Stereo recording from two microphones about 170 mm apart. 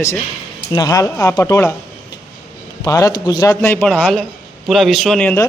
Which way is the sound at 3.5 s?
10° left (ahead or behind).